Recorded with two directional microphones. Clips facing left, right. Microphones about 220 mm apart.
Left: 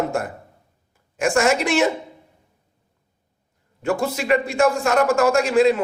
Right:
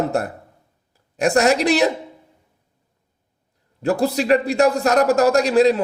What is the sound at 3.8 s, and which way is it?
A man's voice, 35° right (ahead or behind).